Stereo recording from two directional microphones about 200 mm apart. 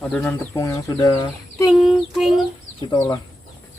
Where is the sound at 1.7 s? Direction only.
Centre (ahead or behind).